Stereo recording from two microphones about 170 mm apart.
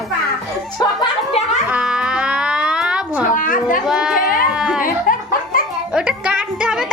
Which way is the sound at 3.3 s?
50° left (ahead or behind).